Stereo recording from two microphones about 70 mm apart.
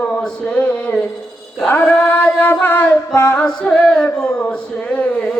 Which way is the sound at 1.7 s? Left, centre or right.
Left.